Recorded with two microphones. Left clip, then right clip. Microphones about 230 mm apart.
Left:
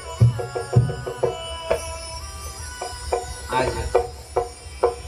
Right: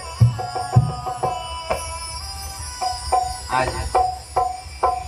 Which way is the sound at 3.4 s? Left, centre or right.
Right.